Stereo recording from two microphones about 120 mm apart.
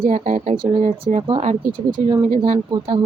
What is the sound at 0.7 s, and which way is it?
Speech, 80° right.